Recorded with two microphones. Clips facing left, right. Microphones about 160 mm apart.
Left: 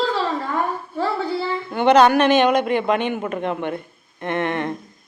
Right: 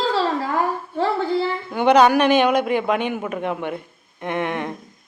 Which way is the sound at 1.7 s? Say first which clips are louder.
Left 1 dB; 10° right (ahead or behind).